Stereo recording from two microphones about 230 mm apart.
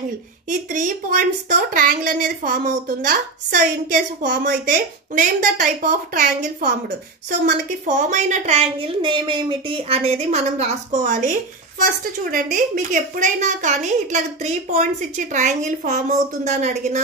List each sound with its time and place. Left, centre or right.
0.5 s a woman's voice: right